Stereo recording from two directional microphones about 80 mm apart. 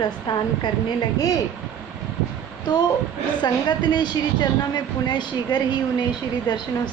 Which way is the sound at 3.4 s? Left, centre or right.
Left.